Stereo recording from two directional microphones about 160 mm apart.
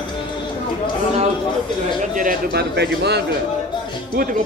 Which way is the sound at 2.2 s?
75° right (ahead or behind).